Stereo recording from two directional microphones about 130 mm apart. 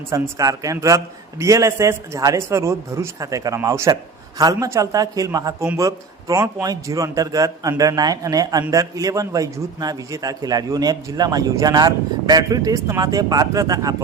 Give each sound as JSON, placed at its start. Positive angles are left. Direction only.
{"t": 0.1, "sound": "a man's voice", "side_deg": -25}